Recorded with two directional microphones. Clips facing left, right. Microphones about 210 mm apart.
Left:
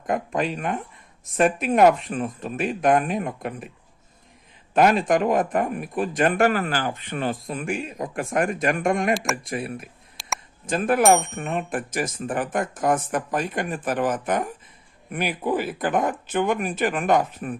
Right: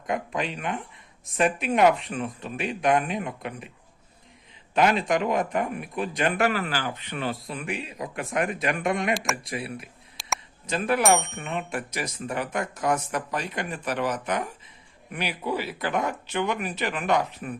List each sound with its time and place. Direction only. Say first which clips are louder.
0.1 s speech: left 4 dB; 45° left (ahead or behind)
4.7 s speech: left 4 dB; 45° left (ahead or behind)
10.2 s a sound: even; centre (ahead or behind)
10.7 s speech: left 4 dB; 50° left (ahead or behind)